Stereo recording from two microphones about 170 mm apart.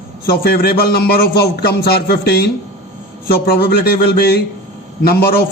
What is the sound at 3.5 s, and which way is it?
A man's voice, 65° left (ahead or behind).